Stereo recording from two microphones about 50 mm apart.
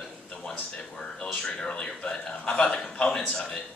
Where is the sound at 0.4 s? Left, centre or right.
Centre.